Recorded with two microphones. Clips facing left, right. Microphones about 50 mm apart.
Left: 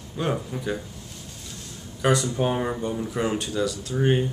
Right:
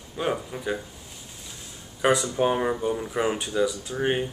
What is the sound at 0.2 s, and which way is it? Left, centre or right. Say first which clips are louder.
Speech: even; centre.